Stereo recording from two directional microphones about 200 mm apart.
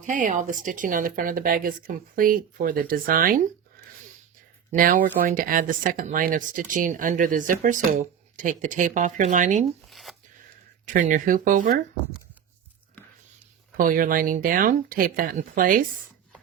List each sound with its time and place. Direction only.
0.0 s speech: 40° right (ahead or behind)
4.7 s speech: 45° right (ahead or behind)
9.9 s tearing: centre (ahead or behind)
10.8 s speech: 40° right (ahead or behind)
13.7 s speech: 45° right (ahead or behind)